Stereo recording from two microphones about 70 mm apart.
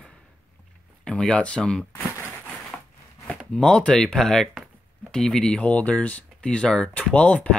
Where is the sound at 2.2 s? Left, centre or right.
Right.